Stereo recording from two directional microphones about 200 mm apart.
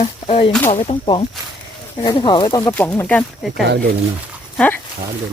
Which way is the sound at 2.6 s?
10° left (ahead or behind).